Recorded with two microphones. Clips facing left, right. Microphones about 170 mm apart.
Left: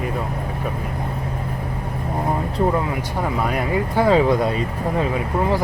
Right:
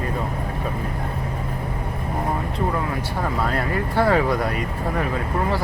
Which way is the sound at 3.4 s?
15° left (ahead or behind).